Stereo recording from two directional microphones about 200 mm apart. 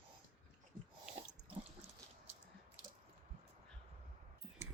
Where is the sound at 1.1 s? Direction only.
5° right (ahead or behind).